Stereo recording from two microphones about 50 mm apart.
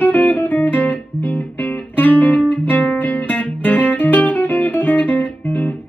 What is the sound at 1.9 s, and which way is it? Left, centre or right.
Music, left.